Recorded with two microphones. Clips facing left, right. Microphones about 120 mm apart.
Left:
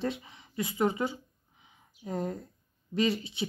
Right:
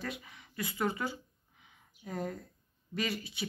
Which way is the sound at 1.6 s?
20° left (ahead or behind).